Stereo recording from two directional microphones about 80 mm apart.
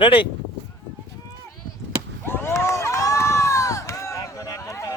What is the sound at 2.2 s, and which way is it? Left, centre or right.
Run, left.